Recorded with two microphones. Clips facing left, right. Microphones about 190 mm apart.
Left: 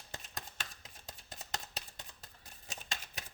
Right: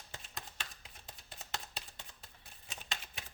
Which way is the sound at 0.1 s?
40° left (ahead or behind).